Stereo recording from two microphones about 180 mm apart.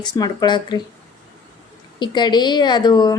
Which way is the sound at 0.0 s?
25° left (ahead or behind).